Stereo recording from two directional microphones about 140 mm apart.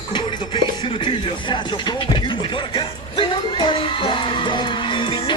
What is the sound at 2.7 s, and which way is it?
Music, 35° left (ahead or behind).